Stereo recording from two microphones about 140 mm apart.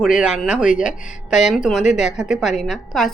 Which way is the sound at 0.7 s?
70° left (ahead or behind).